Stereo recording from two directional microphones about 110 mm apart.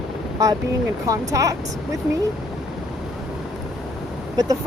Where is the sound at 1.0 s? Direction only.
30° right (ahead or behind).